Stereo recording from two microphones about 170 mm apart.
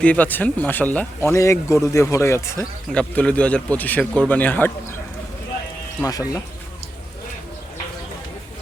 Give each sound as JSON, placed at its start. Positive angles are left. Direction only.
{"t": 0.0, "sound": "speech", "side_deg": 10}
{"t": 2.9, "sound": "speech", "side_deg": 5}
{"t": 6.1, "sound": "speech", "side_deg": 20}